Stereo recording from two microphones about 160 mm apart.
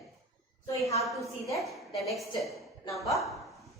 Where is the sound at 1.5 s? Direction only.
Centre (ahead or behind).